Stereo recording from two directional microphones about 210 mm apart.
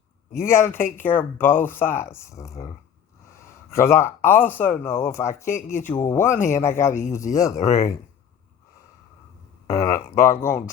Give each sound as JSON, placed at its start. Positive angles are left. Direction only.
{"t": 0.3, "sound": "speech", "side_deg": 10}
{"t": 3.8, "sound": "speech", "side_deg": 10}
{"t": 9.6, "sound": "speech", "side_deg": 15}